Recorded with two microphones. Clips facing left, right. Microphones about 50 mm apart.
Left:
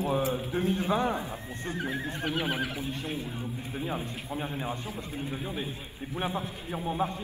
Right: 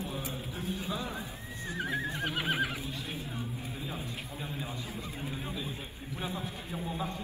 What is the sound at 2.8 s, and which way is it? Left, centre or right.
A man's voice, left.